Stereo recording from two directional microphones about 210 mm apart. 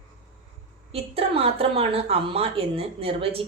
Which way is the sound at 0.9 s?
25° right (ahead or behind).